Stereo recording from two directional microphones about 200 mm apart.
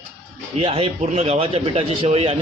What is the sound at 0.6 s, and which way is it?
A man's voice, 30° right (ahead or behind).